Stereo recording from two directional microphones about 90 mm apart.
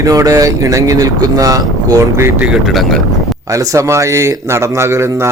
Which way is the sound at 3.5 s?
40° right (ahead or behind).